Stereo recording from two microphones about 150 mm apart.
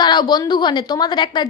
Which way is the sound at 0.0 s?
30° left (ahead or behind).